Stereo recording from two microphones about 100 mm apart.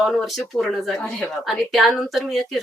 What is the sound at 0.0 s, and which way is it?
Speech, centre (ahead or behind).